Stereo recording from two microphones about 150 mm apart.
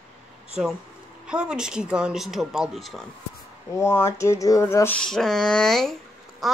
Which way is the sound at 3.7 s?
20° left (ahead or behind).